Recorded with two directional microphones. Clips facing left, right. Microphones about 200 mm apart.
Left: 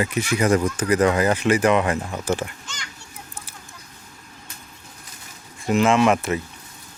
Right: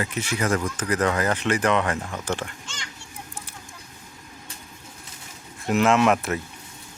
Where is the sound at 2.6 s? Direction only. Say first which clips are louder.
Left 1 dB; 30° right (ahead or behind).